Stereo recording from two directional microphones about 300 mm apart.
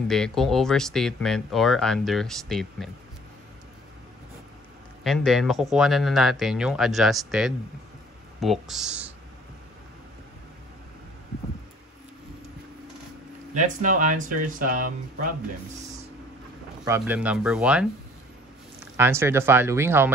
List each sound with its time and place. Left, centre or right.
0.1 s speech: centre
5.0 s speech: centre
13.6 s speech: right
16.8 s speech: centre
18.9 s speech: centre